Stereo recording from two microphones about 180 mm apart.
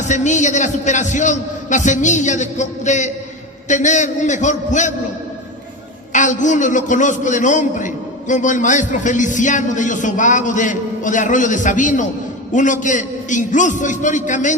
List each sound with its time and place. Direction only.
0.0 s a man's voice: 40° left (ahead or behind)
6.1 s a man's voice: 45° left (ahead or behind)